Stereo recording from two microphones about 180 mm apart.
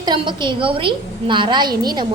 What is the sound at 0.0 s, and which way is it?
A woman's voice, 25° right (ahead or behind).